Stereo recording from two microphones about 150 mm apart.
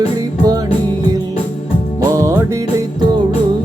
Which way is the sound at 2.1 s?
20° right (ahead or behind).